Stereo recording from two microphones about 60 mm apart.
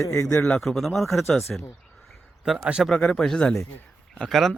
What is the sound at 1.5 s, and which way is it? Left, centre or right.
Speech, centre.